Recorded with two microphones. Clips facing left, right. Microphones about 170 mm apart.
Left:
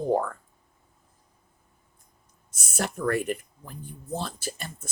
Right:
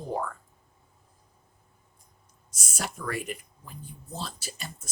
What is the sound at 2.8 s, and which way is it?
Speech, 55° left (ahead or behind).